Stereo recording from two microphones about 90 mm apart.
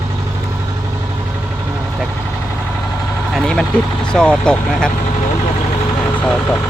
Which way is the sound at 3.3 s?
5° left (ahead or behind).